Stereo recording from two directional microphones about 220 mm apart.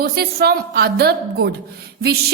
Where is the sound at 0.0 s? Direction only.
45° right (ahead or behind).